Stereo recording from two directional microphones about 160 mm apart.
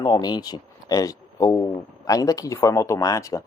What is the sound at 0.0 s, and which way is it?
Speech, 25° left (ahead or behind).